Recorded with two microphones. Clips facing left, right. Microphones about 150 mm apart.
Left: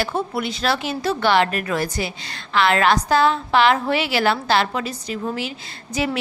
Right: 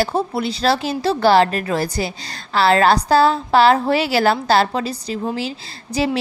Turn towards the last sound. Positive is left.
turn(degrees=-35)  # may be behind; listen again after turning